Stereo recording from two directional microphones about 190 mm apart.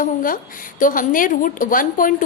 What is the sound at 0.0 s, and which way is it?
A woman's voice, 45° left (ahead or behind).